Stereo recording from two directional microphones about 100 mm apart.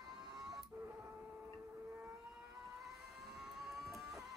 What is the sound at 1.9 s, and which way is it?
Civil defense siren, 15° right (ahead or behind).